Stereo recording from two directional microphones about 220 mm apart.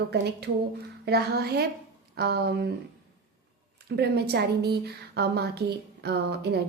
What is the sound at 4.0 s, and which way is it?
A woman's voice, 45° right (ahead or behind).